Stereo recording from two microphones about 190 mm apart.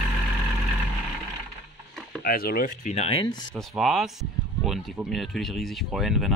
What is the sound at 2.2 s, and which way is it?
Speech, 50° left (ahead or behind).